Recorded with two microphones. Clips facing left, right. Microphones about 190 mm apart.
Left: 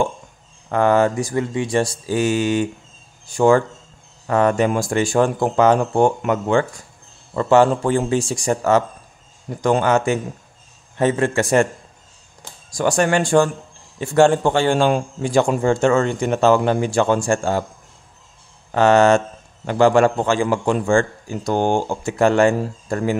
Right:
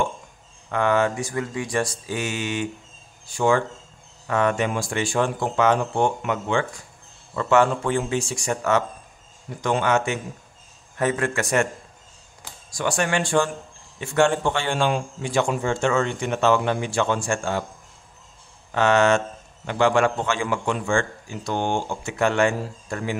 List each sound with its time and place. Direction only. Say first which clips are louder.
0.7 s a man's voice: left 5 dB; 40° left (ahead or behind)
11.0 s a man's voice: left 5 dB; 30° left (ahead or behind)
12.7 s a man's voice: left 6 dB; 40° left (ahead or behind)
18.7 s a man's voice: left 5 dB; 40° left (ahead or behind)